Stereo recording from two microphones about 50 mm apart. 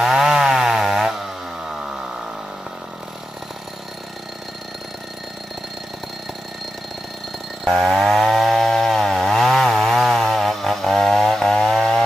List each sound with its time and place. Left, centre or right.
0.0 s chainsaw: centre
7.6 s chainsaw: centre